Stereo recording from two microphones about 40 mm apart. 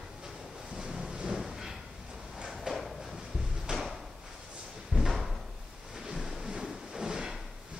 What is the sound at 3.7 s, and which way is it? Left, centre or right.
Drawer open or close, right.